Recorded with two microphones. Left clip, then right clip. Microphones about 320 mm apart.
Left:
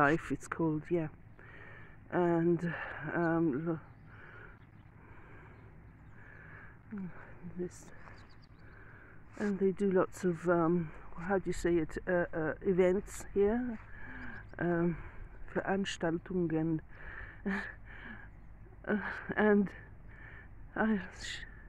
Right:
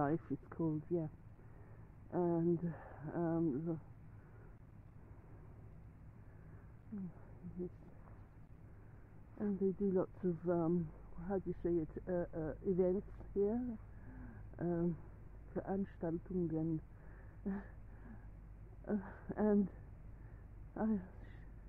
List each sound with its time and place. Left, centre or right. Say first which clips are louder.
0.0 s speech: left 9 dB; left
9.4 s speech: left 6 dB; left
20.7 s speech: left 8 dB; left